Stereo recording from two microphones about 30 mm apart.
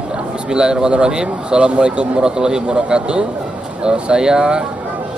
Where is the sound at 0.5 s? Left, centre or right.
Right.